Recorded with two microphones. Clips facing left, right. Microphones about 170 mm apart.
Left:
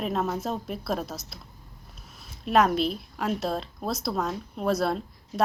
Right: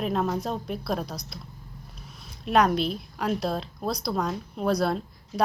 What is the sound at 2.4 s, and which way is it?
A woman's voice, centre (ahead or behind).